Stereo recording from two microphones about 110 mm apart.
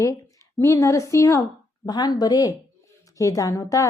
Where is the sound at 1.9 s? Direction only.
40° left (ahead or behind).